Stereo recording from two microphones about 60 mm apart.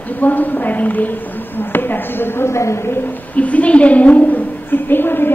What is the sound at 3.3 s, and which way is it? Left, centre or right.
A woman's voice, left.